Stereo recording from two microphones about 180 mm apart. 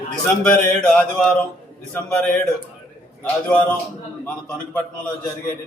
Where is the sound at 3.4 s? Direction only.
10° left (ahead or behind).